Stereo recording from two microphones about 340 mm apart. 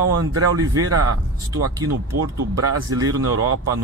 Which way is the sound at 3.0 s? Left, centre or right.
Right.